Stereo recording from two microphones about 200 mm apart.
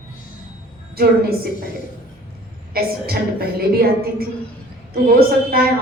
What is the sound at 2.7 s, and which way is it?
A woman's voice, 50° right (ahead or behind).